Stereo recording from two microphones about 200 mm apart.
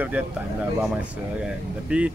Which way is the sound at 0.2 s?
5° right (ahead or behind).